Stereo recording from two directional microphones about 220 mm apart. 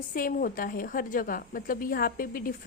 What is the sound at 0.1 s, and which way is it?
A woman's voice, 40° left (ahead or behind).